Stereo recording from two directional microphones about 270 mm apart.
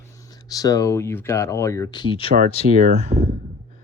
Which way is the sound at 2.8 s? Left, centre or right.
Right.